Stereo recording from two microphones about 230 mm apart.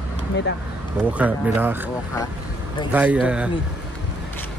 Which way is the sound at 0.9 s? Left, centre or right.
Centre.